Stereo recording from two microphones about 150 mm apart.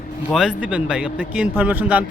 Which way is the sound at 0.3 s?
5° right (ahead or behind).